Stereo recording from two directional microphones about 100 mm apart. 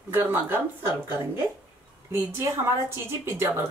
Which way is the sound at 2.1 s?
25° right (ahead or behind).